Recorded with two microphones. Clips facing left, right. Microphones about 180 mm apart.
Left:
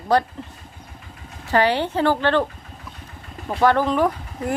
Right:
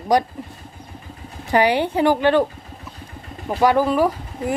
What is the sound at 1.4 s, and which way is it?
Speech, 15° right (ahead or behind).